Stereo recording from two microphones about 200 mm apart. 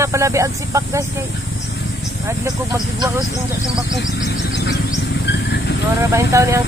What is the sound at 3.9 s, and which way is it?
Vehicle, 60° left (ahead or behind).